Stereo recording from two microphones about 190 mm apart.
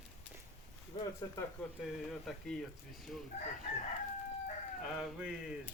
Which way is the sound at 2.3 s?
Centre (ahead or behind).